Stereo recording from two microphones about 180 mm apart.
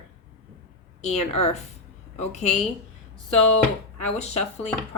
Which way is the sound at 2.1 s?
40° left (ahead or behind).